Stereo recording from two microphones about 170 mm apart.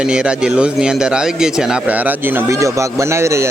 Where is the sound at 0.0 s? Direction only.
5° right (ahead or behind).